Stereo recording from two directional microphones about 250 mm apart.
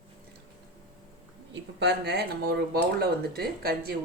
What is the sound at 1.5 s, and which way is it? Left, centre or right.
Speech, right.